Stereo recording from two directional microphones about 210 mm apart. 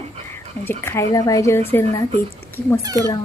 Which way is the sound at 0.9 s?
15° left (ahead or behind).